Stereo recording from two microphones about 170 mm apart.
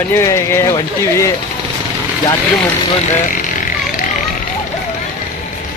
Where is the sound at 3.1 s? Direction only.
50° left (ahead or behind).